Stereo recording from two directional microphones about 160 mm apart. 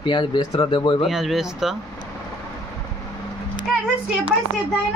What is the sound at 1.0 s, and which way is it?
Speech, centre (ahead or behind).